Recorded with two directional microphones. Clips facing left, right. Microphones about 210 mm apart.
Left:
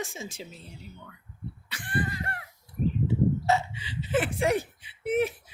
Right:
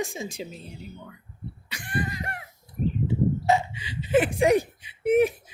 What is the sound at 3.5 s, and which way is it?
Speech, 15° right (ahead or behind).